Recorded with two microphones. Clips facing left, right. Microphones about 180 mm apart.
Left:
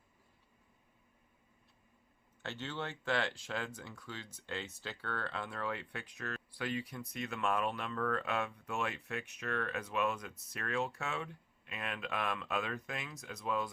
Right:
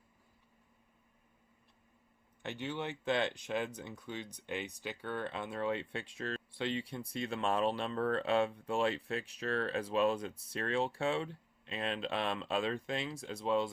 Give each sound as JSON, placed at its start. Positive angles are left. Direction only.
{"t": 2.4, "sound": "speech", "side_deg": -15}